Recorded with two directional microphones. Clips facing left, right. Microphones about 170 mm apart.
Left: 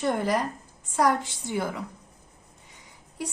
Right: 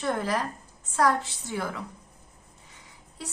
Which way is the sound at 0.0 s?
15° left (ahead or behind).